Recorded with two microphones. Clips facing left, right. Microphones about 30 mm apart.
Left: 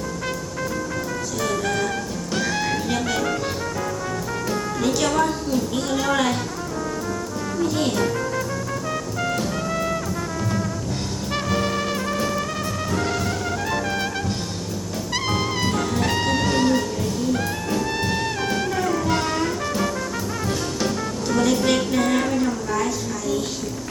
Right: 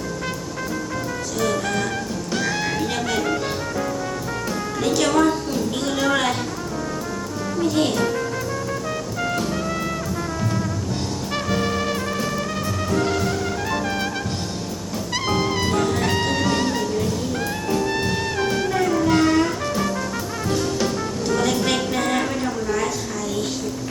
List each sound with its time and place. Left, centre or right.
1.4 s music: centre
4.8 s a woman's voice: centre
7.6 s music: centre
11.3 s music: centre
15.1 s music: centre